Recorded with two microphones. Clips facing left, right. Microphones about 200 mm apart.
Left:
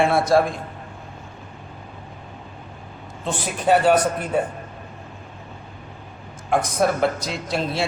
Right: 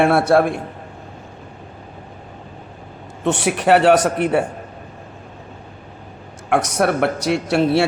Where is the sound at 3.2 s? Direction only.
75° right (ahead or behind).